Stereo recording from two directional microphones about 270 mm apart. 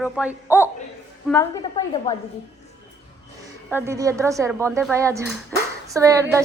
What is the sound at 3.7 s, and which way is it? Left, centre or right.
A woman's voice, centre.